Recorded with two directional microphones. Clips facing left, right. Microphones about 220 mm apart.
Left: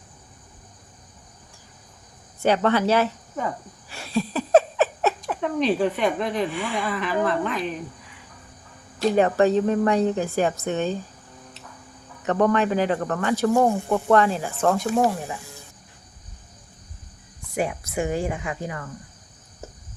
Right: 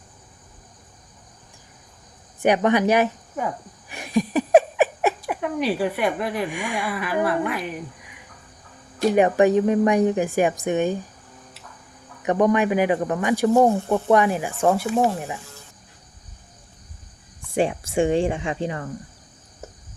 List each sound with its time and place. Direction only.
2.4 s speech: 15° right (ahead or behind)
9.0 s speech: 15° right (ahead or behind)
12.2 s speech: 15° right (ahead or behind)
17.5 s speech: 30° right (ahead or behind)